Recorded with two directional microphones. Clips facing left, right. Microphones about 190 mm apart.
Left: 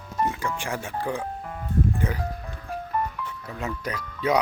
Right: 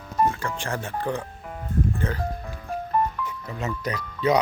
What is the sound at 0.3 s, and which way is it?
Speech, 15° left (ahead or behind).